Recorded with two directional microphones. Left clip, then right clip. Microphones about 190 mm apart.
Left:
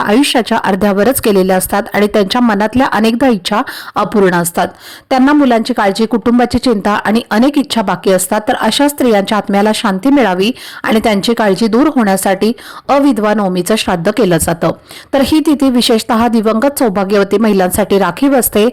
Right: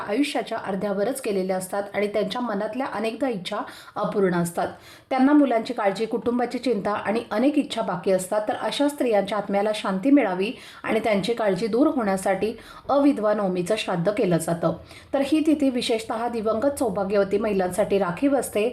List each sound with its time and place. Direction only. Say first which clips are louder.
0.1 s speech: left 12 dB; 55° left (ahead or behind)